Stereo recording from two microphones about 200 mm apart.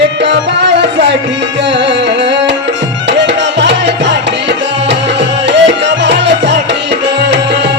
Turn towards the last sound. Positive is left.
turn(degrees=-60)  # may be behind; listen again after turning